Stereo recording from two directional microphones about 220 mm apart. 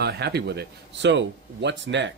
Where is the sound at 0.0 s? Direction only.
50° right (ahead or behind).